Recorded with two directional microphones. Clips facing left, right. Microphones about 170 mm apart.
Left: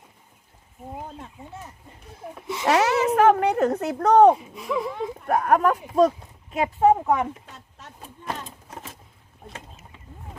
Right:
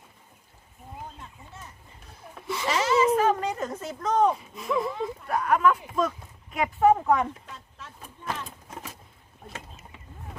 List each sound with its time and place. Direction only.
2.6 s speech: 70° left (ahead or behind)
4.5 s speech: 10° left (ahead or behind)
5.2 s speech: 50° left (ahead or behind); by 6.9 s 25° left (ahead or behind)
6.9 s speech: 15° left (ahead or behind)